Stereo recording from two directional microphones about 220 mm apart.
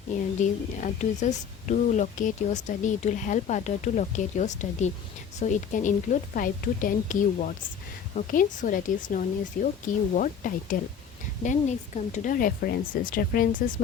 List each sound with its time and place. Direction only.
0.3 s speech: 35° left (ahead or behind)
11.9 s speech: 35° left (ahead or behind)